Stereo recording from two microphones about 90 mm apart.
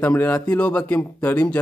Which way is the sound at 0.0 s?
15° left (ahead or behind).